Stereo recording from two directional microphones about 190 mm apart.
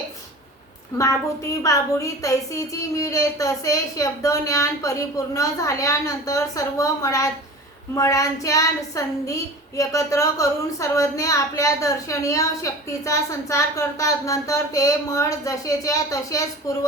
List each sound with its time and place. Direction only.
0.9 s a woman's voice: 15° left (ahead or behind)